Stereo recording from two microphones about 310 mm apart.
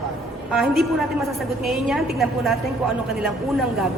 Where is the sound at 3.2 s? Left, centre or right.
Centre.